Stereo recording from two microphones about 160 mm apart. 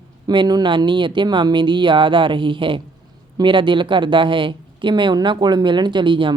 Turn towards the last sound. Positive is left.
turn(degrees=-30)  # may be behind; listen again after turning